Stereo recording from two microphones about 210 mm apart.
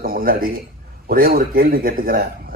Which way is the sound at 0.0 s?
45° right (ahead or behind).